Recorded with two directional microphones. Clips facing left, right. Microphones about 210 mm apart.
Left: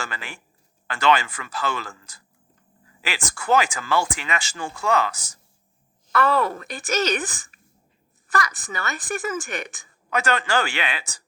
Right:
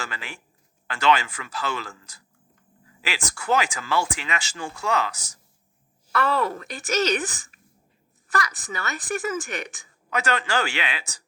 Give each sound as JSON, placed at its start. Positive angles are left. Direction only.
{"t": 0.0, "sound": "a woman's voice", "side_deg": 50}